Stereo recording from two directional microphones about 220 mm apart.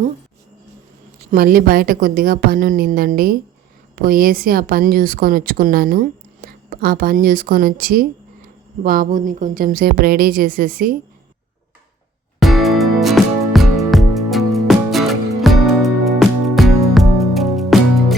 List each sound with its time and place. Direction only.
1.3 s speech: 40° right (ahead or behind)
12.4 s music: centre (ahead or behind)